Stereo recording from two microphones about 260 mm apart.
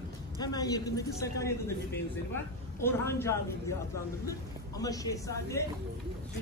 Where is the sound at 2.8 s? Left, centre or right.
Centre.